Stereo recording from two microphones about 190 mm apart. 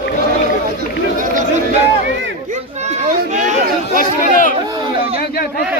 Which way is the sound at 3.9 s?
45° left (ahead or behind).